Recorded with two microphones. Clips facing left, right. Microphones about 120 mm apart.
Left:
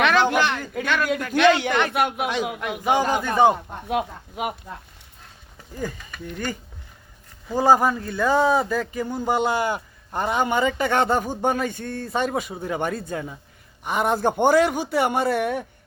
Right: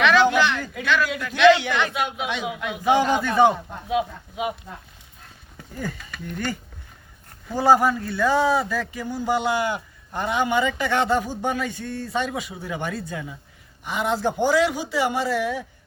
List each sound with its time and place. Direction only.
0.0 s a man's voice: 45° left (ahead or behind)
3.2 s a man's voice: 15° left (ahead or behind)
3.8 s a man's voice: 55° left (ahead or behind)
7.5 s speech: 20° left (ahead or behind)
8.9 s a man's voice: 45° left (ahead or behind)